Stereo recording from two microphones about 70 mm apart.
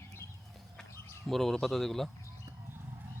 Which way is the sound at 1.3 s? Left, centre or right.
Centre.